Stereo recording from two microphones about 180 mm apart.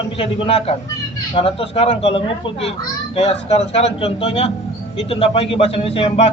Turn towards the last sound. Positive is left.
turn(degrees=30)  # may be behind; listen again after turning